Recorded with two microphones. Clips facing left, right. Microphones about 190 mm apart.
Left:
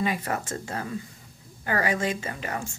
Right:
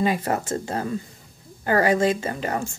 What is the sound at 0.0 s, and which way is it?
A woman's voice, 30° right (ahead or behind).